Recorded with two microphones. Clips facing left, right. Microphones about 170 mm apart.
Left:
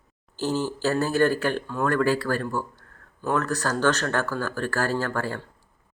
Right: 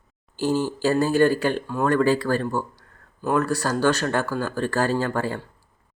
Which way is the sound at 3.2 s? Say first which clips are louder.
Right 3 dB; 10° right (ahead or behind).